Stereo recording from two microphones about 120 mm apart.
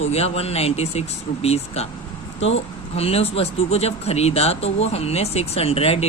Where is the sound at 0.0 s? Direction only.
60° left (ahead or behind).